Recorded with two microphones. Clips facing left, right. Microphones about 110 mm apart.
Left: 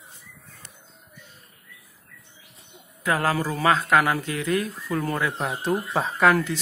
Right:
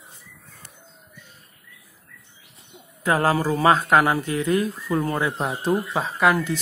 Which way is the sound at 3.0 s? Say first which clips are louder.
Right 3 dB; 30° right (ahead or behind).